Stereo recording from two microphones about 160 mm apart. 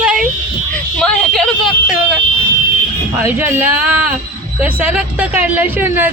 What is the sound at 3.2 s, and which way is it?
Speech, 15° right (ahead or behind).